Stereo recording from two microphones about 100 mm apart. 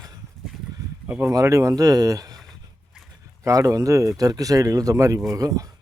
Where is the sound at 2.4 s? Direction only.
Centre (ahead or behind).